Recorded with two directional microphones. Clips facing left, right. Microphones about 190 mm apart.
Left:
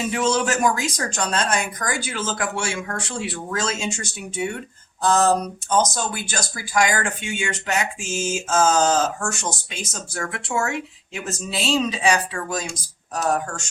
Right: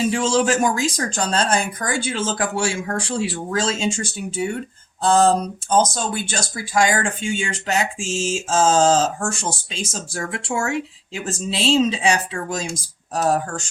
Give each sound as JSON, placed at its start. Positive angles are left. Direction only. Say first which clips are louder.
{"t": 0.0, "sound": "speech", "louder": "right 3 dB", "side_deg": -30}